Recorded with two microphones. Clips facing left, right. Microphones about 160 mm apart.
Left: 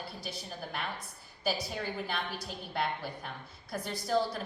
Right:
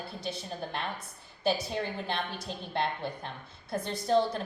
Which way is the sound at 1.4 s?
25° right (ahead or behind).